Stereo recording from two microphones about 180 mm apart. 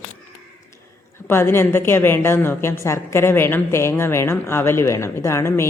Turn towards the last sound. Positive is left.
turn(degrees=15)  # may be behind; listen again after turning